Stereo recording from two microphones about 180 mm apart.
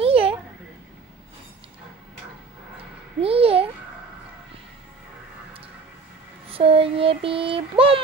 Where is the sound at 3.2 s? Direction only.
30° right (ahead or behind).